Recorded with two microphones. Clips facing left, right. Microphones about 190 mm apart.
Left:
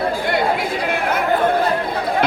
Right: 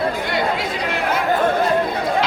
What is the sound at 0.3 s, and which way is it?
Chatter, 55° left (ahead or behind).